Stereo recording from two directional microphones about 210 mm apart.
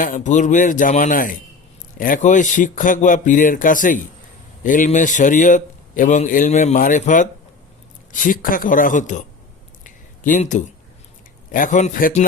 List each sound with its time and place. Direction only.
0.0 s a man's voice: 35° left (ahead or behind)
9.8 s a sound: 35° left (ahead or behind)
11.5 s a man's voice: 40° left (ahead or behind)